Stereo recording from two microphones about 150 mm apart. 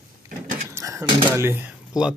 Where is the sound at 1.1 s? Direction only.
35° right (ahead or behind).